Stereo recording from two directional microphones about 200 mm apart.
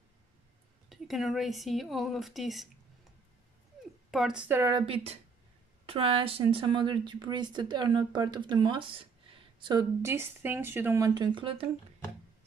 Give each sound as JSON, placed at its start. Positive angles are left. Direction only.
{"t": 0.8, "sound": "speech", "side_deg": 0}
{"t": 4.1, "sound": "speech", "side_deg": -5}
{"t": 4.8, "sound": "speech", "side_deg": -30}
{"t": 10.0, "sound": "speech", "side_deg": -10}